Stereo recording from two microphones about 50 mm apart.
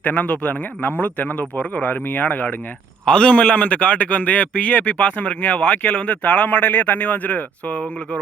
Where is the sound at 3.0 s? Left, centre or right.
Centre.